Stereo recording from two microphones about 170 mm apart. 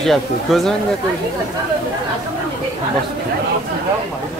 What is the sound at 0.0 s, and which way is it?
Speech, centre (ahead or behind).